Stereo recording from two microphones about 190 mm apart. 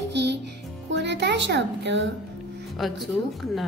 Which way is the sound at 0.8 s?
65° right (ahead or behind).